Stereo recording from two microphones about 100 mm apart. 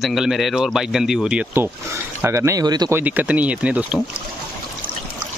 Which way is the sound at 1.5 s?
25° right (ahead or behind).